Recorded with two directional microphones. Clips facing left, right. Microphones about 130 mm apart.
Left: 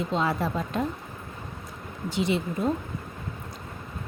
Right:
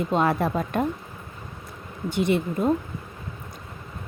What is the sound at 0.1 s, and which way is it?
Speech, 55° right (ahead or behind).